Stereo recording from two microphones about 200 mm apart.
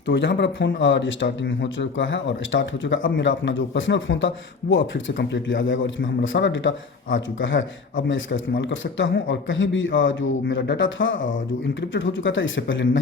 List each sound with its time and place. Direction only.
0.1 s speech: 60° left (ahead or behind)